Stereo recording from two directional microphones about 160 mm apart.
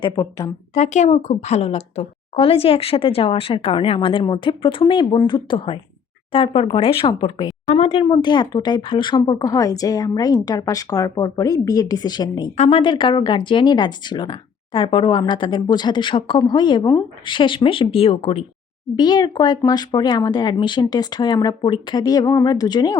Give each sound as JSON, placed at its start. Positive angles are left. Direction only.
{"t": 0.0, "sound": "speech", "side_deg": 25}
{"t": 0.7, "sound": "a woman's voice", "side_deg": 45}
{"t": 12.5, "sound": "a woman's voice", "side_deg": 40}
{"t": 18.9, "sound": "speech", "side_deg": 25}